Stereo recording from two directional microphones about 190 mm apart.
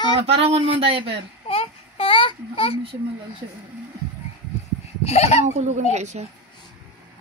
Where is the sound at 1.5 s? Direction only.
30° left (ahead or behind).